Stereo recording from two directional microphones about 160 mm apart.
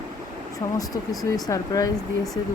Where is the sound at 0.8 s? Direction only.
20° left (ahead or behind).